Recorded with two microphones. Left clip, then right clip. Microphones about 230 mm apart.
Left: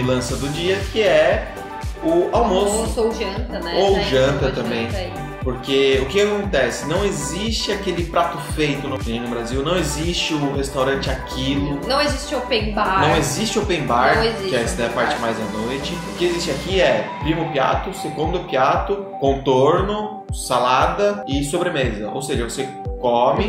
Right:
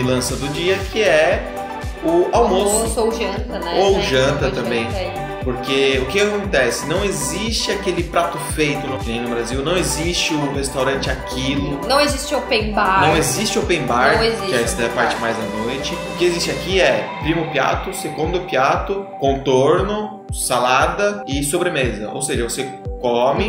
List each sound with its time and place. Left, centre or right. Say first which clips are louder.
0.0 s music: right 1 dB; centre
3.0 s a woman's voice: right 2 dB; centre
3.8 s music: right 1 dB; centre
5.7 s music: even; centre
11.9 s a woman's voice: right 4 dB; centre
13.2 s music: right 2 dB; centre
14.0 s a woman's voice: right 1 dB; centre
14.5 s speech: right 2 dB; centre
16.2 s music: right 2 dB; centre
19.2 s speech: right 1 dB; centre
23.0 s music: even; centre